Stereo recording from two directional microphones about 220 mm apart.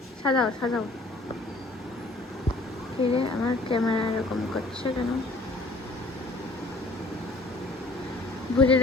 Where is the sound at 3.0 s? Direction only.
25° left (ahead or behind).